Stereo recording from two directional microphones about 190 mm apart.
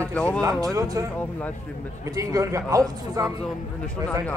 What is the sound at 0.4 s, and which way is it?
Speech, 20° right (ahead or behind).